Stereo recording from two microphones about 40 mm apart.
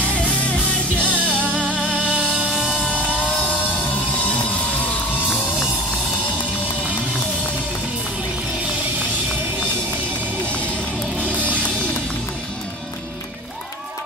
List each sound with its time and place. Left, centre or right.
0.2 s music: left
1.0 s music: right
4.2 s music: left